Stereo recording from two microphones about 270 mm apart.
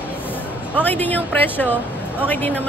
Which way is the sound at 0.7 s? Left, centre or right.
Centre.